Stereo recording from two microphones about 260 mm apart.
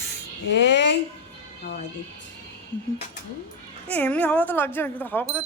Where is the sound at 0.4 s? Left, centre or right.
Left.